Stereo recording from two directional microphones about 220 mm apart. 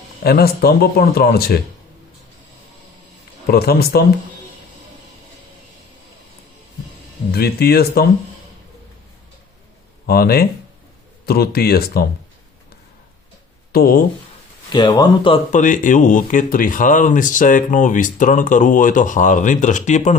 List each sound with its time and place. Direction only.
0.2 s a man's voice: 45° left (ahead or behind)
3.4 s a man's voice: 45° left (ahead or behind)
7.3 s a man's voice: 45° left (ahead or behind)
10.1 s a man's voice: 45° left (ahead or behind)
13.7 s speech: 40° left (ahead or behind)
14.7 s speech: 20° left (ahead or behind)
15.5 s speech: 35° left (ahead or behind)